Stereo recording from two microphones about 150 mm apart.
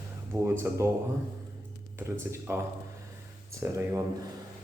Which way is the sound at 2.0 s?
10° right (ahead or behind).